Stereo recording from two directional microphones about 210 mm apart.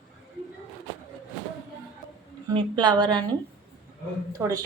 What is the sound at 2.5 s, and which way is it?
Speech, 20° right (ahead or behind).